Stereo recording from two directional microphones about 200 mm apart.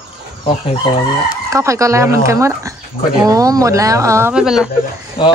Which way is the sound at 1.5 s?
15° right (ahead or behind).